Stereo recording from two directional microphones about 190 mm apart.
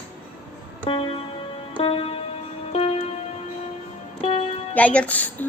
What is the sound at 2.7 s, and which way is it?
Tick-tock, 30° left (ahead or behind).